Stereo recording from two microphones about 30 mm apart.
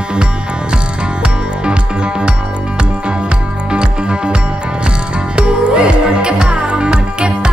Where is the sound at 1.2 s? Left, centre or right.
Right.